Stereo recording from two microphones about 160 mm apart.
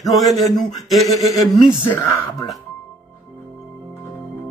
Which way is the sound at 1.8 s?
10° left (ahead or behind).